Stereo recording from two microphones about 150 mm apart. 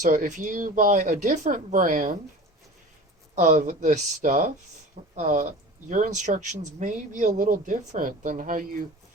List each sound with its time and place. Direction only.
0.0 s speech: 60° right (ahead or behind)
3.3 s speech: 50° right (ahead or behind)